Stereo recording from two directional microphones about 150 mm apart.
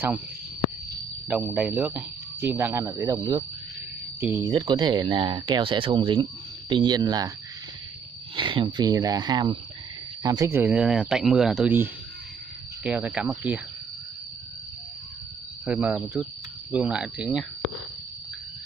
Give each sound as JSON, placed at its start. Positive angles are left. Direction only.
{"t": 1.4, "sound": "speech", "side_deg": -10}
{"t": 4.2, "sound": "speech", "side_deg": -15}
{"t": 4.5, "sound": "speech", "side_deg": -30}
{"t": 8.4, "sound": "speech", "side_deg": -30}
{"t": 10.6, "sound": "speech", "side_deg": -10}
{"t": 15.6, "sound": "speech", "side_deg": -5}